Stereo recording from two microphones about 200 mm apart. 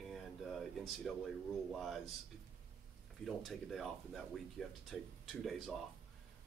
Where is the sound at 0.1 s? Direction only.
Centre (ahead or behind).